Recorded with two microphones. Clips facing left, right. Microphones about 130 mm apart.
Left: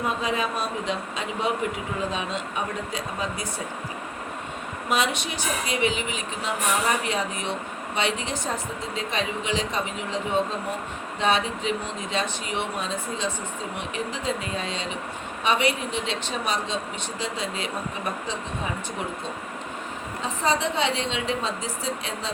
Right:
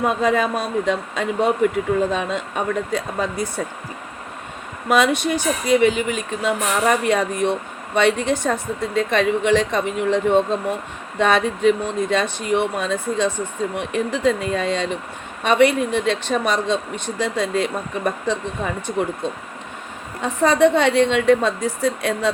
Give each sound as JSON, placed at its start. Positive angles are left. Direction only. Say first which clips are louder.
{"t": 0.0, "sound": "speech", "louder": "right 8 dB", "side_deg": -55}
{"t": 4.9, "sound": "speech", "louder": "right 8 dB", "side_deg": -50}
{"t": 20.2, "sound": "speech", "louder": "right 10 dB", "side_deg": -55}